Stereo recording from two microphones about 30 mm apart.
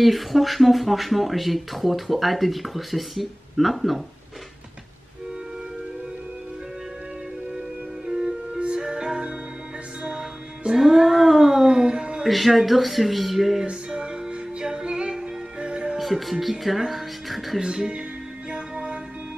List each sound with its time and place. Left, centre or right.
0.0 s speech: centre
8.1 s music: centre
10.8 s a sound: centre
11.6 s a sound: centre
12.3 s speech: centre
13.7 s music: right
14.6 s music: centre
15.6 s music: right
16.0 s speech: centre
17.6 s speech: right
18.5 s music: right